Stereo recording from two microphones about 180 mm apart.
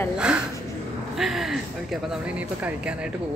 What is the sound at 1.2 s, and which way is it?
Speech, centre (ahead or behind).